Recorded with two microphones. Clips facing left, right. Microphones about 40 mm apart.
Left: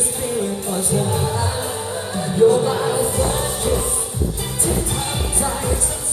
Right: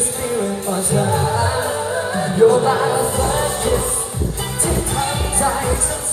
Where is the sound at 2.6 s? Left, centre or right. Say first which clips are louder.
Right 3 dB; right.